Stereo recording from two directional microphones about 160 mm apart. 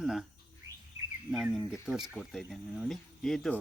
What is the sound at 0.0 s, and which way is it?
Bird, 5° right (ahead or behind).